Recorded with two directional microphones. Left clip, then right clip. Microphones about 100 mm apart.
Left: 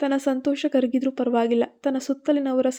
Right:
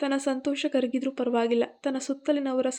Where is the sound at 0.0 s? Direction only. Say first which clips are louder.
Left 4 dB; 35° left (ahead or behind).